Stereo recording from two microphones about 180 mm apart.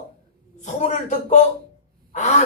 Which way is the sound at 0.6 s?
40° left (ahead or behind).